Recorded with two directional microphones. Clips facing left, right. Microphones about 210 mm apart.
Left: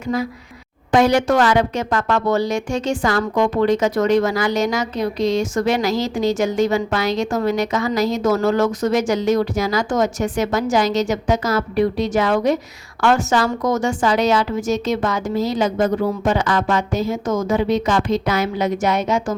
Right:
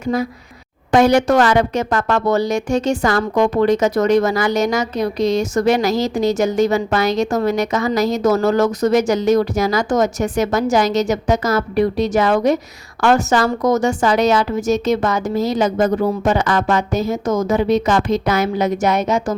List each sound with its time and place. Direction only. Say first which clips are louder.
0.0 s a woman's voice: right 2 dB; 40° right (ahead or behind)